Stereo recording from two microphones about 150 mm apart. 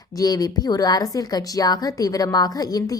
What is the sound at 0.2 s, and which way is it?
A woman's voice, 25° left (ahead or behind).